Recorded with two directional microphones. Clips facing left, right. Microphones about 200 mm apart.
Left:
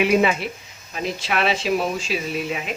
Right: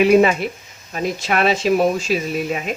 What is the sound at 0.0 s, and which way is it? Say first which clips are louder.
Speech: right 5 dB; 45° right (ahead or behind).